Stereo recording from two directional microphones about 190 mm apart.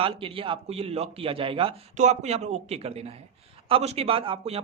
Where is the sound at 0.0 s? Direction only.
30° right (ahead or behind).